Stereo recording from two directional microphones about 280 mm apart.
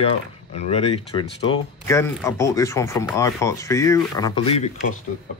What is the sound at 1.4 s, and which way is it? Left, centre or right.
Speech, centre.